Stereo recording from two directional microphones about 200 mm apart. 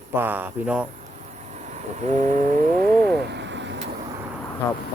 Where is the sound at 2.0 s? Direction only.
35° right (ahead or behind).